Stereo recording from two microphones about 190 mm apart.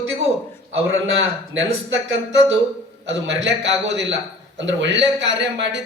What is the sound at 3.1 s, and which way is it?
A man's voice, 70° right (ahead or behind).